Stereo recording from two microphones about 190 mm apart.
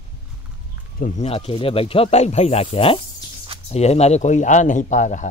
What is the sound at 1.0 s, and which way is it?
Speech, 40° left (ahead or behind).